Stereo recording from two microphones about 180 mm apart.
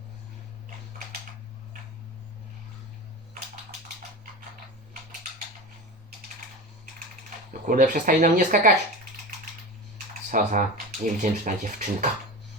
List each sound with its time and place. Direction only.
7.7 s speech: 50° right (ahead or behind)
10.2 s speech: 45° right (ahead or behind)